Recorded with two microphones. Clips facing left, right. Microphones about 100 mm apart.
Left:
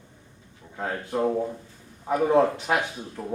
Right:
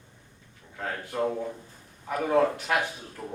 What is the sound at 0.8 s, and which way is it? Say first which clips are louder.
A man's voice: left 3 dB; 15° left (ahead or behind).